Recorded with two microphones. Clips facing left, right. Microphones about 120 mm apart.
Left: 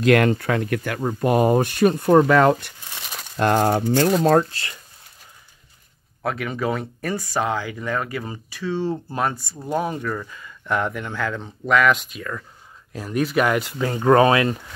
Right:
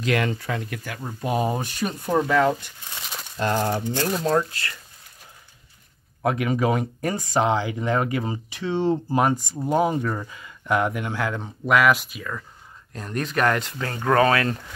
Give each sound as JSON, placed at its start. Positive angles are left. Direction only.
{"t": 0.0, "sound": "speech", "side_deg": 55}
{"t": 6.2, "sound": "speech", "side_deg": -15}